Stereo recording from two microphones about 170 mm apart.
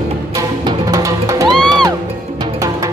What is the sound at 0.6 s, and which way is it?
Music, 20° right (ahead or behind).